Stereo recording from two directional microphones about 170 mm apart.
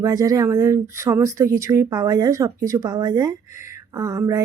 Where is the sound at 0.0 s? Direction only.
20° right (ahead or behind).